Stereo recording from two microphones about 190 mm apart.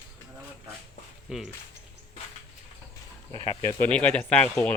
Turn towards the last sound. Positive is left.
turn(degrees=5)  # may be behind; listen again after turning